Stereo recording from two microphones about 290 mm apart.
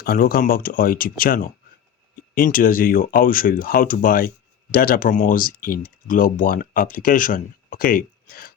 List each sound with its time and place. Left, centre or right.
0.0 s speech: left